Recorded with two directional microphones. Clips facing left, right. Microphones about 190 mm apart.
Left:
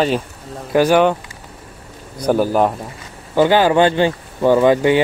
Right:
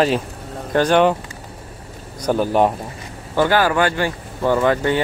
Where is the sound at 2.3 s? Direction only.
5° left (ahead or behind).